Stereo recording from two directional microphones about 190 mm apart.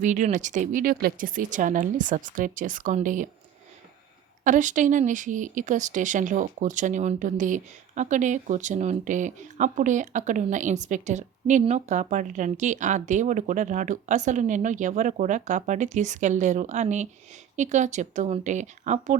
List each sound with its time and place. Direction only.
0.0 s speech: 40° right (ahead or behind)
4.4 s speech: 40° right (ahead or behind)